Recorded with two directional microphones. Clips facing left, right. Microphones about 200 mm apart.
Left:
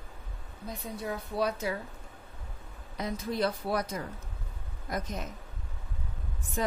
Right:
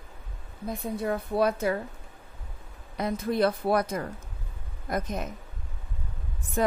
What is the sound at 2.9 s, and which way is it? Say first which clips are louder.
A woman's voice: right 5 dB; 55° right (ahead or behind).